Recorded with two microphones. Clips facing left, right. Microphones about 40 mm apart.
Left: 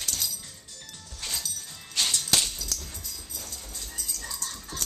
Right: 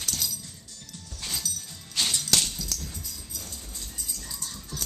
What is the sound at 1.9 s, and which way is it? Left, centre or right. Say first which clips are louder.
Music: even; centre.